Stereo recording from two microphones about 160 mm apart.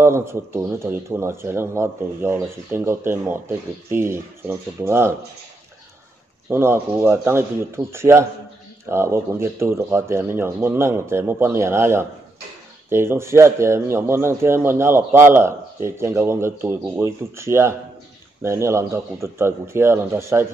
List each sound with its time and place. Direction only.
0.0 s speech: 15° right (ahead or behind)
6.5 s speech: 15° right (ahead or behind)